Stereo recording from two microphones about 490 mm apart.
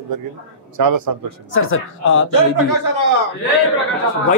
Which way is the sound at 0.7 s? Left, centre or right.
Right.